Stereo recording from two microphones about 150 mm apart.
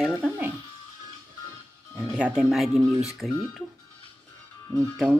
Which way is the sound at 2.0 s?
5° right (ahead or behind).